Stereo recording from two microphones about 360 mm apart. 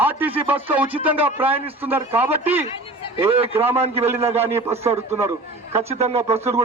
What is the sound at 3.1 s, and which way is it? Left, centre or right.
A man's voice, centre.